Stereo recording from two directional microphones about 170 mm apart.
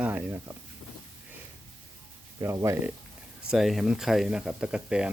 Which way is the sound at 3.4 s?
Centre (ahead or behind).